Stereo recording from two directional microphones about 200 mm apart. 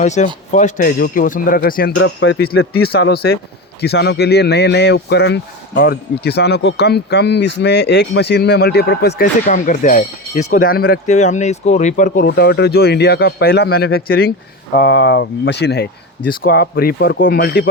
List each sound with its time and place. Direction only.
0.0 s speech: 35° left (ahead or behind); by 2.4 s 70° left (ahead or behind)
2.7 s speech: 50° left (ahead or behind)
9.5 s speech: 40° left (ahead or behind)
12.3 s speech: 55° left (ahead or behind)